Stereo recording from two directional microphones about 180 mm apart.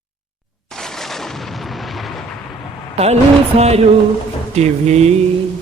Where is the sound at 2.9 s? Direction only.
35° right (ahead or behind).